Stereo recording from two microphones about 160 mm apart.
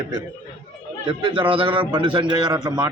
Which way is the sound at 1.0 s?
30° right (ahead or behind).